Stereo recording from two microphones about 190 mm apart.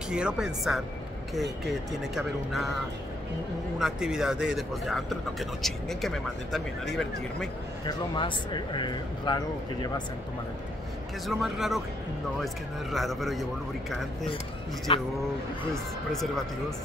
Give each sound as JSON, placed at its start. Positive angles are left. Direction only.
{"t": 0.1, "sound": "speech", "side_deg": -5}
{"t": 2.1, "sound": "speech", "side_deg": 0}
{"t": 3.8, "sound": "speech", "side_deg": -5}
{"t": 7.8, "sound": "speech", "side_deg": 25}
{"t": 11.2, "sound": "speech", "side_deg": 0}
{"t": 12.9, "sound": "speech", "side_deg": 0}
{"t": 14.9, "sound": "speech", "side_deg": 30}
{"t": 15.7, "sound": "speech", "side_deg": 0}